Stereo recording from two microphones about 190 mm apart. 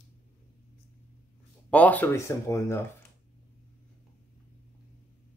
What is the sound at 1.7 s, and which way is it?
Speech, 10° left (ahead or behind).